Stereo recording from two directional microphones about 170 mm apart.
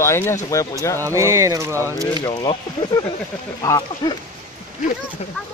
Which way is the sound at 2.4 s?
25° left (ahead or behind).